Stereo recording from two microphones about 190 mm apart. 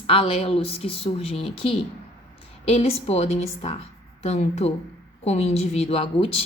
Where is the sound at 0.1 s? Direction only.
30° left (ahead or behind).